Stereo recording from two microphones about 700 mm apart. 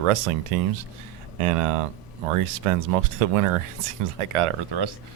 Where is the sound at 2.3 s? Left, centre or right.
Right.